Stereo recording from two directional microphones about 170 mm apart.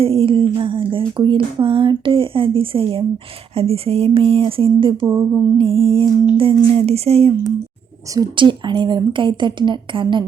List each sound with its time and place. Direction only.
0.0 s speech: 35° right (ahead or behind)
5.0 s a sound: 15° right (ahead or behind)
5.5 s speech: 30° right (ahead or behind)
8.1 s speech: 25° right (ahead or behind)